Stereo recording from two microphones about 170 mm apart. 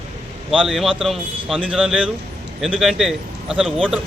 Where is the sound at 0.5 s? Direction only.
Centre (ahead or behind).